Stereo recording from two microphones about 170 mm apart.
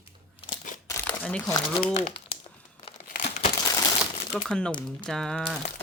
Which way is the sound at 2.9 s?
45° left (ahead or behind).